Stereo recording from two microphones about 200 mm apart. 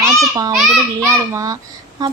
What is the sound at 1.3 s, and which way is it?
Speech, 15° right (ahead or behind).